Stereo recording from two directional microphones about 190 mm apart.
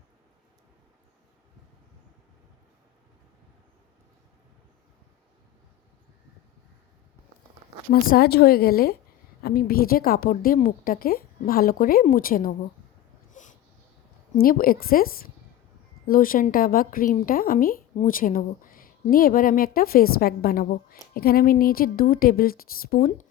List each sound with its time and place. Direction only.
7.9 s a woman's voice: 55° left (ahead or behind)
13.3 s a sound: 40° left (ahead or behind)
14.4 s a woman's voice: 50° left (ahead or behind)
23.0 s speech: 40° left (ahead or behind)